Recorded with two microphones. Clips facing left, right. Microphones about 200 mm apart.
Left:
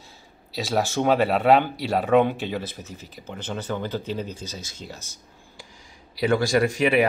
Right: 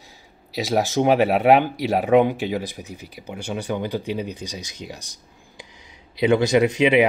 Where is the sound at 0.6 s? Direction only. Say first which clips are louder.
Right 3 dB; 15° right (ahead or behind).